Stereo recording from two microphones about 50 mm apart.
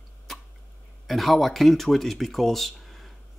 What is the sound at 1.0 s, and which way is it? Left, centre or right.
Speech, centre.